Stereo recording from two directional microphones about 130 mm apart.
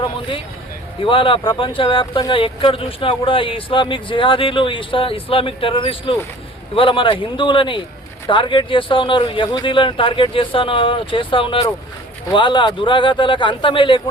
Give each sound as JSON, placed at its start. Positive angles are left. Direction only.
{"t": 0.0, "sound": "speech", "side_deg": 40}